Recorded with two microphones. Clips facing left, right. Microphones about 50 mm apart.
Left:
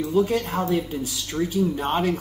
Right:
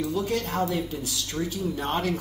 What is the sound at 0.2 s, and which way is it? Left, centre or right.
A man's voice, centre.